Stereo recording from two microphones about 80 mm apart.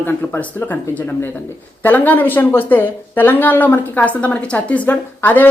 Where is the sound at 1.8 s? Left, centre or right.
Left.